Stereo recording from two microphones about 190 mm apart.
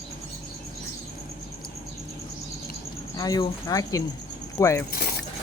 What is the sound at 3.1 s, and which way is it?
Speech, 20° left (ahead or behind).